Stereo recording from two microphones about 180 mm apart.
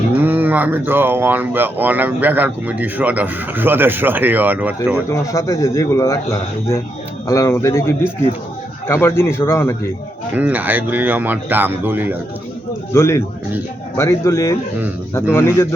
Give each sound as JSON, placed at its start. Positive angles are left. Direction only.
{"t": 0.2, "sound": "speech", "side_deg": -10}
{"t": 4.9, "sound": "speech", "side_deg": 15}
{"t": 7.3, "sound": "speech", "side_deg": 15}
{"t": 8.9, "sound": "speech", "side_deg": 15}
{"t": 10.3, "sound": "speech", "side_deg": -10}
{"t": 12.9, "sound": "speech", "side_deg": 15}